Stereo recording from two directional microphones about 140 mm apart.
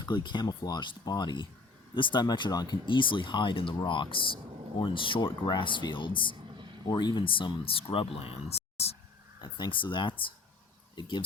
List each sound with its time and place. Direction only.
0.0 s speech: 30° left (ahead or behind); by 9.0 s 50° left (ahead or behind)
9.4 s speech: 35° left (ahead or behind)